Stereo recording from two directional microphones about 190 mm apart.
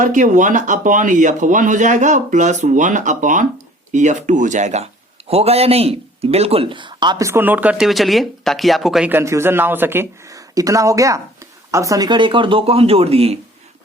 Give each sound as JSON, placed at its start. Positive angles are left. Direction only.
{"t": 0.0, "sound": "speech", "side_deg": -40}